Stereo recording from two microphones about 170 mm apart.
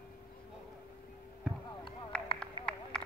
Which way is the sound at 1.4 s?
5° right (ahead or behind).